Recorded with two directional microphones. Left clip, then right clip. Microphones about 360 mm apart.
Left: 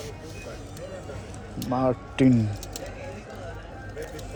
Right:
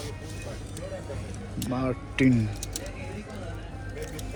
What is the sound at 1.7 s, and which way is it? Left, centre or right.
Speech, centre.